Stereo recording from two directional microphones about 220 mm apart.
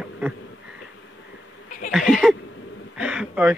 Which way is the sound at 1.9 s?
Centre (ahead or behind).